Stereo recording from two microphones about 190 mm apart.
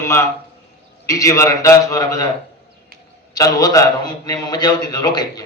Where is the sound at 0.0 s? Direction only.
15° left (ahead or behind).